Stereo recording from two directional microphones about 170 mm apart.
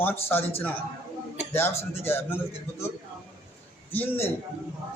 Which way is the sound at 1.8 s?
15° left (ahead or behind).